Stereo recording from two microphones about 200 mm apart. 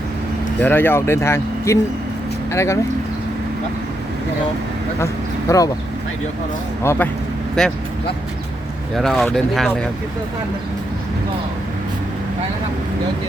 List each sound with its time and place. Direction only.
0.6 s speech: 10° left (ahead or behind)
5.5 s speech: 15° left (ahead or behind)
6.8 s speech: 10° left (ahead or behind)
9.0 s speech: centre (ahead or behind)